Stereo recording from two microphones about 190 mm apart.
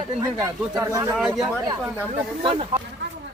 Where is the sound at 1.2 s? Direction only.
Centre (ahead or behind).